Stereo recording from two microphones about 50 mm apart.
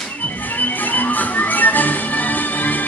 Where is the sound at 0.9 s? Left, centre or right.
Left.